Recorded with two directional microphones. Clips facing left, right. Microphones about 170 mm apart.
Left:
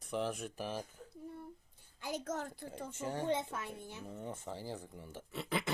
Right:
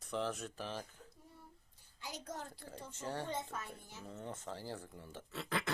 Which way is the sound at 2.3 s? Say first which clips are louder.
Left 5 dB; 65° left (ahead or behind).